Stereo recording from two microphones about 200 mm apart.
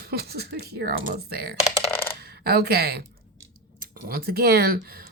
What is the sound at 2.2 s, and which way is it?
A woman's voice, 50° right (ahead or behind).